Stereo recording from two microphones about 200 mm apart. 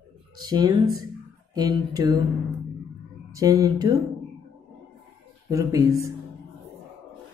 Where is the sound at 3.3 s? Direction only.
20° right (ahead or behind).